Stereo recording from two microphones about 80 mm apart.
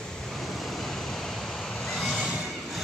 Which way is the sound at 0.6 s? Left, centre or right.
Centre.